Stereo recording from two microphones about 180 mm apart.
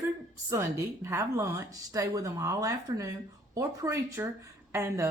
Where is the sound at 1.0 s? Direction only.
15° right (ahead or behind).